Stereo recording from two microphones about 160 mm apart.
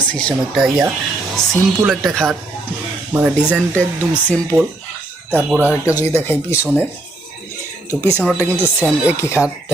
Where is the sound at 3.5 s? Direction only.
5° left (ahead or behind).